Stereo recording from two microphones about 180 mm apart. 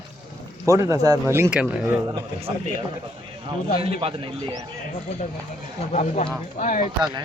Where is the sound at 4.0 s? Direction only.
30° right (ahead or behind).